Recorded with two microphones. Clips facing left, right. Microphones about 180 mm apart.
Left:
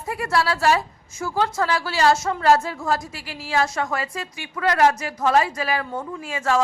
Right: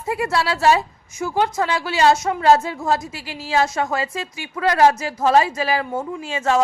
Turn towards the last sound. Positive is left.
turn(degrees=-25)  # may be behind; listen again after turning